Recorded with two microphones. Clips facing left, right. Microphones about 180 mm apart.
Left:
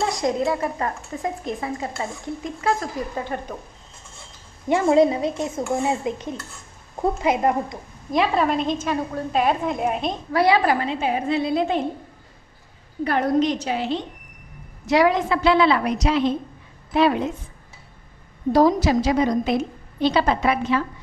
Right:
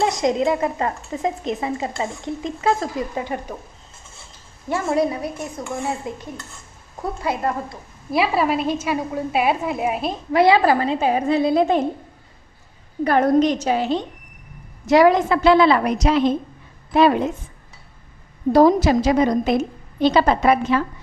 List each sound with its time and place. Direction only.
0.0 s speech: 20° right (ahead or behind)
3.2 s a woman's voice: 10° right (ahead or behind)
4.6 s a woman's voice: 20° left (ahead or behind)
8.1 s a woman's voice: 5° right (ahead or behind)
10.3 s a woman's voice: 25° right (ahead or behind); by 11.8 s 40° right (ahead or behind)
13.0 s a woman's voice: 45° right (ahead or behind)
18.5 s a woman's voice: 55° right (ahead or behind)